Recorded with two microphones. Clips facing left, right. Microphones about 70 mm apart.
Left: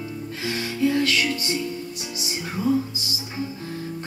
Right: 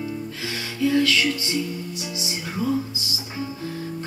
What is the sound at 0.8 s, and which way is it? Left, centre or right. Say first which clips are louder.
Music: right 2 dB; left.